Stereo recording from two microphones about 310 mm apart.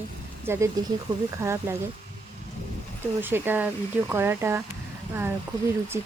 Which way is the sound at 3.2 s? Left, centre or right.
Centre.